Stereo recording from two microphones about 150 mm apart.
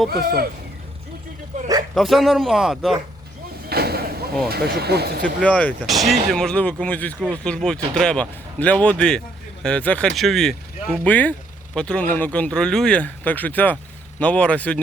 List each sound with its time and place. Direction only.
0.1 s speech: 90° right
2.0 s speech: centre (ahead or behind)
3.7 s a sound: 90° right
4.4 s speech: 90° right
5.2 s speech: 10° left (ahead or behind)